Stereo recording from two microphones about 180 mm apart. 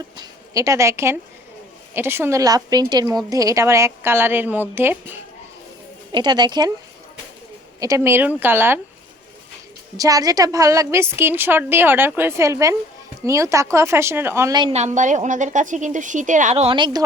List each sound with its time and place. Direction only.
0.2 s a woman's voice: 20° right (ahead or behind)
6.1 s speech: 25° right (ahead or behind)
7.8 s a woman's voice: 15° right (ahead or behind)
10.0 s a woman's voice: 20° right (ahead or behind)
14.7 s a woman's voice: 40° right (ahead or behind)